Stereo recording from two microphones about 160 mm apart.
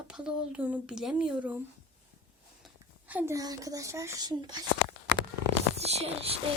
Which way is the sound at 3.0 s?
15° right (ahead or behind).